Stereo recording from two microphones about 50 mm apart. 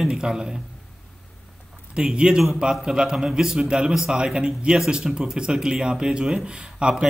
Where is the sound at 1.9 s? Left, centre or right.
Centre.